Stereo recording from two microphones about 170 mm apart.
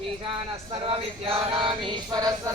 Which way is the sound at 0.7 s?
35° right (ahead or behind).